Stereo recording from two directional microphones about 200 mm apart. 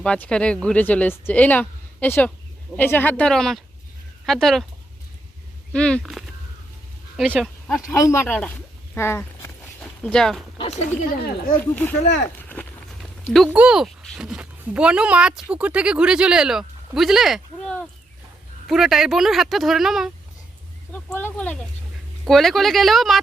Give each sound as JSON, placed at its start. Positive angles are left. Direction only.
{"t": 0.0, "sound": "speech", "side_deg": 5}
{"t": 5.7, "sound": "speech", "side_deg": 5}
{"t": 7.9, "sound": "speech", "side_deg": 15}
{"t": 9.0, "sound": "a sound", "side_deg": 10}
{"t": 10.6, "sound": "a sound", "side_deg": 30}
{"t": 11.2, "sound": "speech", "side_deg": 45}
{"t": 11.6, "sound": "speech", "side_deg": 10}
{"t": 12.0, "sound": "speech", "side_deg": 55}
{"t": 12.5, "sound": "speech", "side_deg": 10}